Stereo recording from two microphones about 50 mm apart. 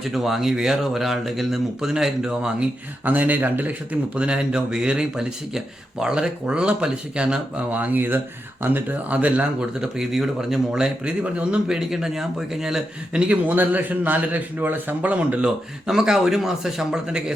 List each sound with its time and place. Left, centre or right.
0.0 s speech: centre
3.0 s speech: right
7.7 s a man's voice: right
9.0 s speech: right
9.8 s speech: centre
11.2 s speech: right
11.7 s speech: centre
13.1 s speech: right
13.6 s a man's voice: right
15.9 s speech: centre